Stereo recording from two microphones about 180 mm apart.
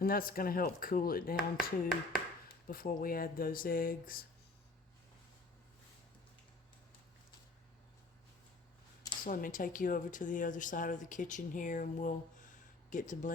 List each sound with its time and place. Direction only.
0.0 s speech: 55° left (ahead or behind)
2.6 s speech: 55° left (ahead or behind)
9.2 s speech: 50° left (ahead or behind)